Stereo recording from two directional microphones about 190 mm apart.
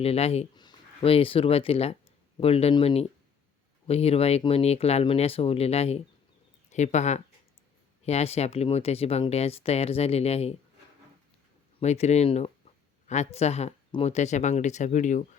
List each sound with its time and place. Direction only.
0.0 s speech: 30° left (ahead or behind)
11.8 s speech: 35° left (ahead or behind)